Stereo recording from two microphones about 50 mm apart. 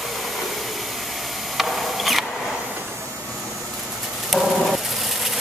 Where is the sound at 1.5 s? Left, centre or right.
Centre.